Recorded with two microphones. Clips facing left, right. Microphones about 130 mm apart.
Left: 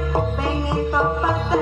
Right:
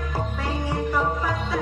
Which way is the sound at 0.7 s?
25° left (ahead or behind).